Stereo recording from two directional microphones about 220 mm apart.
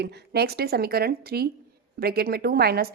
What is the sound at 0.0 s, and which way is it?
A woman's voice, 45° right (ahead or behind).